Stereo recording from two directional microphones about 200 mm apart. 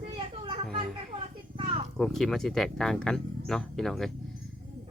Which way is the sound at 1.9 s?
Centre (ahead or behind).